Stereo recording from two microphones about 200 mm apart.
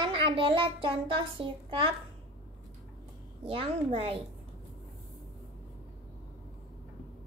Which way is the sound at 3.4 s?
25° right (ahead or behind).